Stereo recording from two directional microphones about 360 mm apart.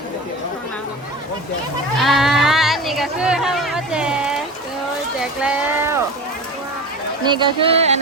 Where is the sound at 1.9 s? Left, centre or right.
Centre.